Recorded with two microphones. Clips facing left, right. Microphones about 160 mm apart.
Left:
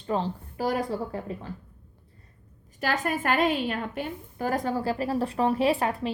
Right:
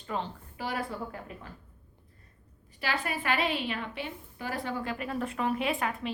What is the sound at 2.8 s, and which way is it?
A woman's voice, 45° left (ahead or behind).